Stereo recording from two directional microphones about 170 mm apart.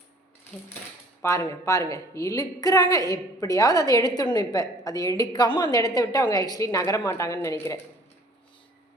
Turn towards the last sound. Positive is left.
turn(degrees=20)  # may be behind; listen again after turning